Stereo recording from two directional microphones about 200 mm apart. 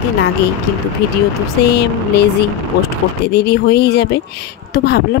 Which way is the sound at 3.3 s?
55° left (ahead or behind).